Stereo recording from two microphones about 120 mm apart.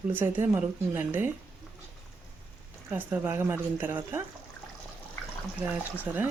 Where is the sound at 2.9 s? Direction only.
15° right (ahead or behind).